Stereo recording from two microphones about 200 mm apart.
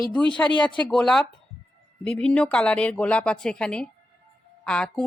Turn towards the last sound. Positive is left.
turn(degrees=5)  # may be behind; listen again after turning